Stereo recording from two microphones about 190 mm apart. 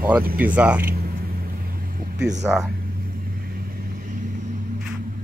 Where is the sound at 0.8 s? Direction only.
50° right (ahead or behind).